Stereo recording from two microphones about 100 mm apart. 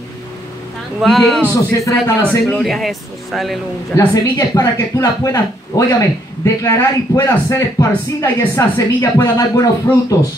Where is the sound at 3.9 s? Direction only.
35° left (ahead or behind).